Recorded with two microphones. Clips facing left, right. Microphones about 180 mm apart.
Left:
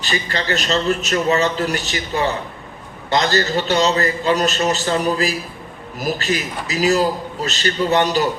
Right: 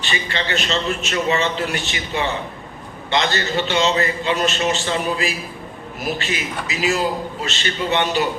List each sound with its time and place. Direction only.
0.0 s a man's voice: 40° left (ahead or behind)